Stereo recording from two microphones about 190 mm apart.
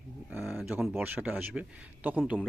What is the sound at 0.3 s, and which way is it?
Speech, 5° right (ahead or behind).